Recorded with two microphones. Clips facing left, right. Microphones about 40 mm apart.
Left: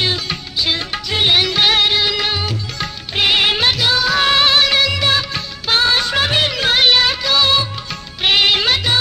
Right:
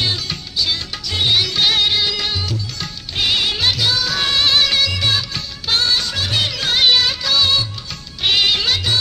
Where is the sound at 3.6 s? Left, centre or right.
Centre.